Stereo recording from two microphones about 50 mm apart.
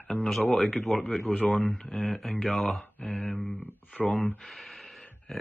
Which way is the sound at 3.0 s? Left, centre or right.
Left.